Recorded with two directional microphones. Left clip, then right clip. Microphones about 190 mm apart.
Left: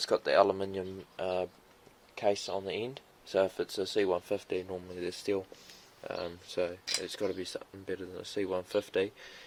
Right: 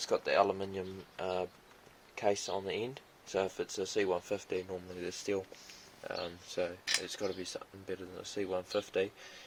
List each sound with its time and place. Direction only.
0.0 s speech: 35° left (ahead or behind); by 1.5 s 15° left (ahead or behind)
2.1 s speech: 5° left (ahead or behind)
3.3 s speech: 30° left (ahead or behind)